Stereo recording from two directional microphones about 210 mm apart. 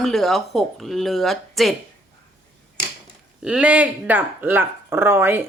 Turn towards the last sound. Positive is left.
turn(degrees=-10)  # may be behind; listen again after turning